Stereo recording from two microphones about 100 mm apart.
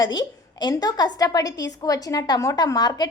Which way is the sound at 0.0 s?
45° left (ahead or behind).